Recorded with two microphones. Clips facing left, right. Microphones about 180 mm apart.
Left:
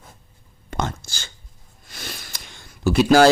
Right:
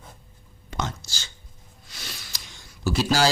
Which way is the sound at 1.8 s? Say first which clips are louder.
Left 5 dB; 50° left (ahead or behind).